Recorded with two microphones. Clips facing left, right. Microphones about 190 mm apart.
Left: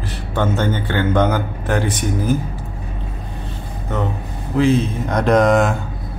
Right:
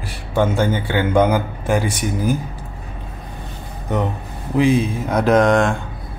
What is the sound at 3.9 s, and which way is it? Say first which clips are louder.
Speech: right 2 dB; 15° right (ahead or behind).